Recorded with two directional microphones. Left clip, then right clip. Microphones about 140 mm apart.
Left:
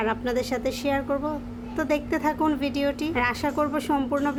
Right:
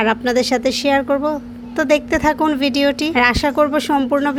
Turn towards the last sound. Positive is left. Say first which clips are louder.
# right 8 dB
turn(degrees=-35)  # may be behind; listen again after turning